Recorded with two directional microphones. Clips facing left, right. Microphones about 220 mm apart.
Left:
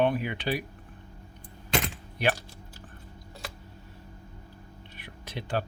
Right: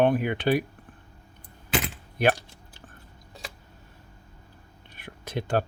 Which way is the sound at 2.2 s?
50° right (ahead or behind).